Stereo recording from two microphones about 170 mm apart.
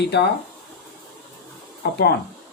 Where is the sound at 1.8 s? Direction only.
70° left (ahead or behind).